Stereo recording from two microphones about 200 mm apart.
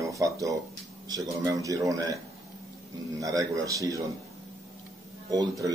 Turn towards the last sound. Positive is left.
turn(degrees=-20)  # may be behind; listen again after turning